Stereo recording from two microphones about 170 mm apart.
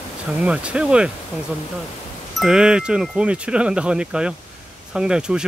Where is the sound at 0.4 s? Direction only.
5° right (ahead or behind).